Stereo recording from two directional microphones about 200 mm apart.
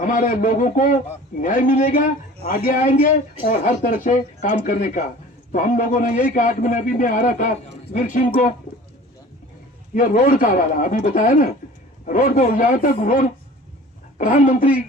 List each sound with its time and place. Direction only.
0.0 s a man's voice: 40° left (ahead or behind)
8.3 s a man's voice: 35° left (ahead or behind)
9.9 s a man's voice: 45° left (ahead or behind)